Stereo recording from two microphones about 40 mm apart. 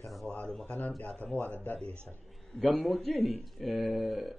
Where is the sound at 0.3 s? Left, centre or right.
Left.